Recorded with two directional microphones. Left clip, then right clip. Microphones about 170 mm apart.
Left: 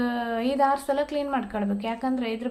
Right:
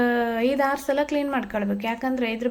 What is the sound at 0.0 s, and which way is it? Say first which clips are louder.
A woman's voice: right 5 dB; 20° right (ahead or behind).